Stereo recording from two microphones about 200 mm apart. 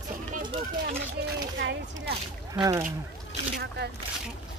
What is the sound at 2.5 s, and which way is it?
Speech, 20° right (ahead or behind).